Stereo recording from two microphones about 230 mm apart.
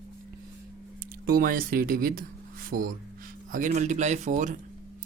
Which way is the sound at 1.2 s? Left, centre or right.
Right.